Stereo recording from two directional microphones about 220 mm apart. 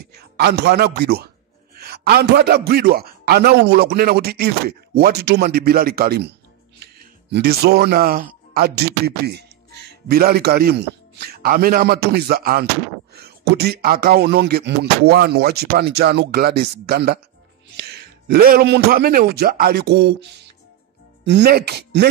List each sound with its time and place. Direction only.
0.4 s a man's voice: 50° right (ahead or behind)
21.3 s a man's voice: 45° right (ahead or behind)